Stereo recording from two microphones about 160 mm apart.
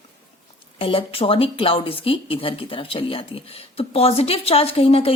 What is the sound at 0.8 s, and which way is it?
Speech, 35° left (ahead or behind).